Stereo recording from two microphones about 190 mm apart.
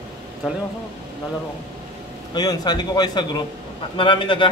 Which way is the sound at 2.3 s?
20° left (ahead or behind).